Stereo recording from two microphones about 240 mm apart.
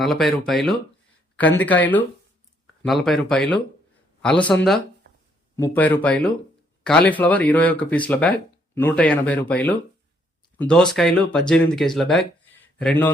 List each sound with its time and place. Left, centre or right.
0.0 s speech: centre
5.0 s a sound: right
5.5 s speech: centre